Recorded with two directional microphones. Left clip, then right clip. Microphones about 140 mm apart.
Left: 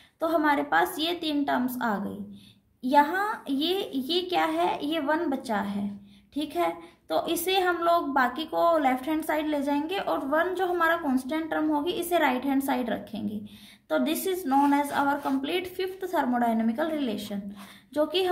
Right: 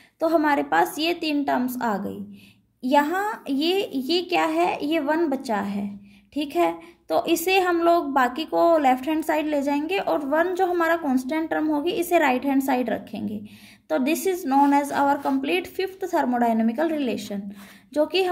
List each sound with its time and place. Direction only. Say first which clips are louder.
0.2 s a woman's voice: right 4 dB; 50° right (ahead or behind)